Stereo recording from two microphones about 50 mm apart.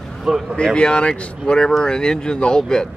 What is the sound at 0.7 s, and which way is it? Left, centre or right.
Speech, centre.